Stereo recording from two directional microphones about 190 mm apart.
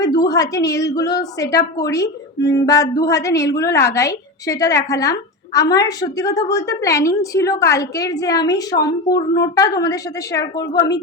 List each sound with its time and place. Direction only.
0.0 s a woman's voice: 20° left (ahead or behind)